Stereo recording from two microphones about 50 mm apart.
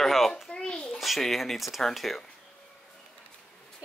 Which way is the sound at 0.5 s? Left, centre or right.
Centre.